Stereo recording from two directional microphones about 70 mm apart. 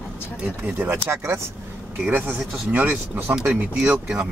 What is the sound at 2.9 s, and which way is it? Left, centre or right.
Speech, right.